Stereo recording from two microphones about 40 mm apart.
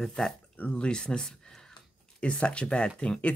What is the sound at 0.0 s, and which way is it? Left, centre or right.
Speech, centre.